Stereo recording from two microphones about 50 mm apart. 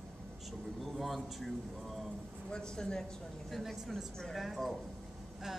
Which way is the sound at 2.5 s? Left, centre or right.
Centre.